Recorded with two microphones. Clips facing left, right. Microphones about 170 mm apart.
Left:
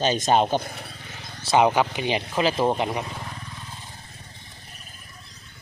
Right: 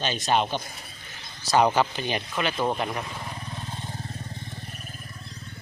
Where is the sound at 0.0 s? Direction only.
40° left (ahead or behind).